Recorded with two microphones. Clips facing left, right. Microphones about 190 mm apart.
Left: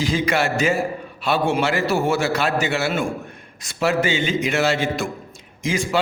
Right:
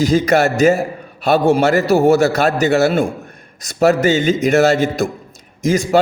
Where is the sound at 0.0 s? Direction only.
40° right (ahead or behind).